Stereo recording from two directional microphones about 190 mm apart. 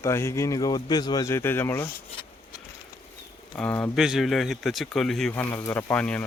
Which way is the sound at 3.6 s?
10° left (ahead or behind).